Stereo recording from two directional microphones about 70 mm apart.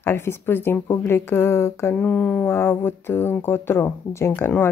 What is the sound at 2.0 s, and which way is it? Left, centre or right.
Speech, centre.